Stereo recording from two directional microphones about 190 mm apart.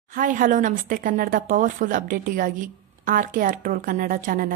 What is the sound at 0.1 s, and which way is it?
A woman's voice, 45° right (ahead or behind).